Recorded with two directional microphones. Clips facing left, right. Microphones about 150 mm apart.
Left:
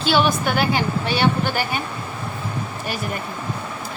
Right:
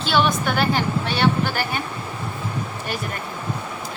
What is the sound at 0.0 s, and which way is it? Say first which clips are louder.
A woman's voice: left 1 dB; centre (ahead or behind).